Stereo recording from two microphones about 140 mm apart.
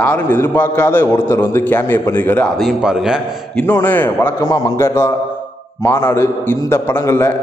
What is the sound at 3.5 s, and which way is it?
A man's voice, 15° left (ahead or behind).